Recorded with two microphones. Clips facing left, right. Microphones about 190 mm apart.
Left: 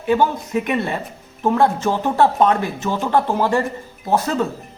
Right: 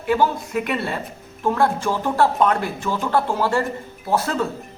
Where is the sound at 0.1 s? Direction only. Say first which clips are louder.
Left 2 dB; 20° left (ahead or behind).